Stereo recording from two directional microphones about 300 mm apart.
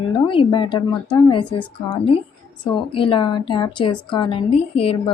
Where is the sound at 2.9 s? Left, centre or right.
Centre.